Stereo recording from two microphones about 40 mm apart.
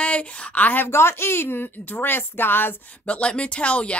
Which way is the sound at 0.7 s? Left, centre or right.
Left.